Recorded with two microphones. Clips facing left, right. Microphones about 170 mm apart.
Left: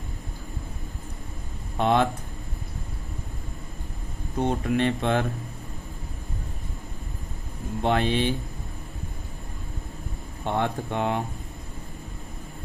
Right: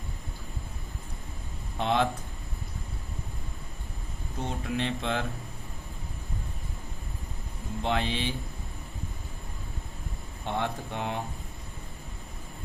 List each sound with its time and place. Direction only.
1.8 s speech: 55° left (ahead or behind)
4.4 s speech: 55° left (ahead or behind)
7.8 s speech: 55° left (ahead or behind)
10.4 s speech: 55° left (ahead or behind)